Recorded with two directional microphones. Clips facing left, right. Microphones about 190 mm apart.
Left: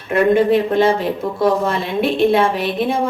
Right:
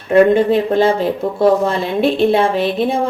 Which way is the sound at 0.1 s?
30° right (ahead or behind).